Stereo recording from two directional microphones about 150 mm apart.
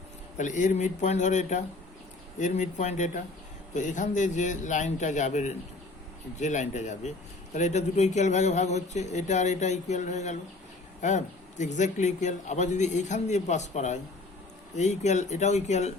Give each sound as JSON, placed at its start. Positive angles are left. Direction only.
{"t": 0.3, "sound": "a man's voice", "side_deg": 55}